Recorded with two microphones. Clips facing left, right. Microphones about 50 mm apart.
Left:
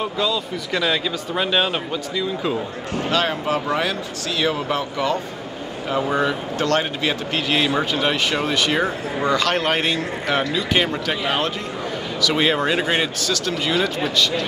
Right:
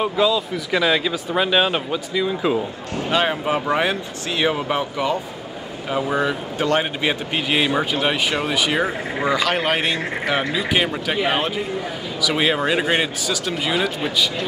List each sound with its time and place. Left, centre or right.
0.0 s speech: centre